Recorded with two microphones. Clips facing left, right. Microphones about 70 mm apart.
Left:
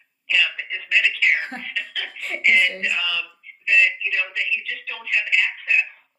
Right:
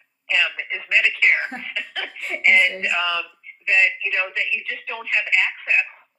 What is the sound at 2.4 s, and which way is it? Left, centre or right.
A woman's voice, right.